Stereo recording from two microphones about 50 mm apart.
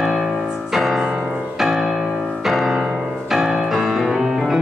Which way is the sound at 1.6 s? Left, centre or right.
Centre.